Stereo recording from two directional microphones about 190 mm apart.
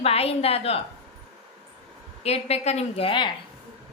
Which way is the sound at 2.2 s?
35° left (ahead or behind).